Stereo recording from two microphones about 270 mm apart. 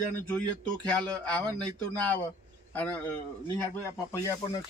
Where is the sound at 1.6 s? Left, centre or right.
Centre.